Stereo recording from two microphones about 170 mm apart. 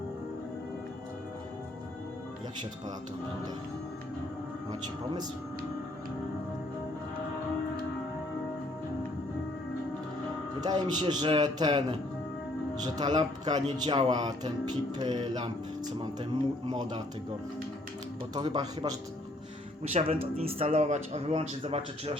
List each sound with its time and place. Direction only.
10.6 s speech: 25° right (ahead or behind)
16.6 s speech: 25° right (ahead or behind)
18.3 s speech: 25° right (ahead or behind)
19.8 s speech: 35° right (ahead or behind)